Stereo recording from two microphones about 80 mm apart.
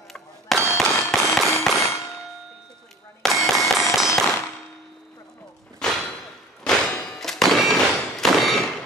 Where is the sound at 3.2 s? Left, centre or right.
Centre.